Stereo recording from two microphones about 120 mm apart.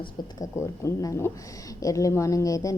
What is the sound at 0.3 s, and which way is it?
A woman's voice, 25° left (ahead or behind).